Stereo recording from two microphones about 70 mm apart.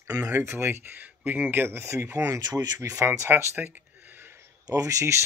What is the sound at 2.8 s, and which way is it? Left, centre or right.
Speech, right.